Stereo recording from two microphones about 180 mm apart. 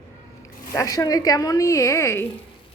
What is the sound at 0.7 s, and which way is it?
Speech, 20° left (ahead or behind).